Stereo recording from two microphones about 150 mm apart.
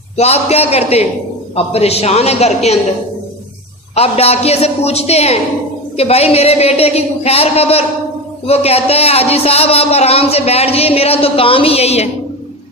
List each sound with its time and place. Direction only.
0.2 s a woman's voice: 45° left (ahead or behind)
3.9 s a woman's voice: 45° left (ahead or behind)